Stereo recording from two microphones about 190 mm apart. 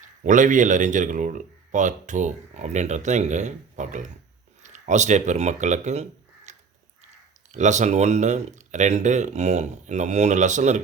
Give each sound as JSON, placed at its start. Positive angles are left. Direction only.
{"t": 0.2, "sound": "speech", "side_deg": -40}